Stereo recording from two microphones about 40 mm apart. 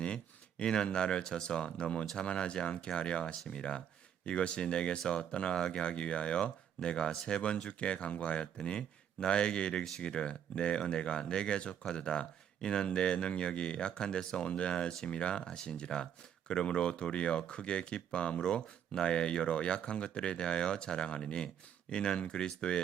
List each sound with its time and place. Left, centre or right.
0.0 s speech: left
3.4 s speech: centre